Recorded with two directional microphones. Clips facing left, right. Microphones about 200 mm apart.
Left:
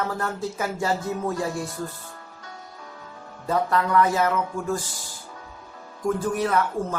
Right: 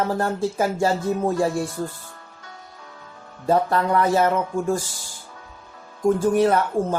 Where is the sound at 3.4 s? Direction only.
30° right (ahead or behind).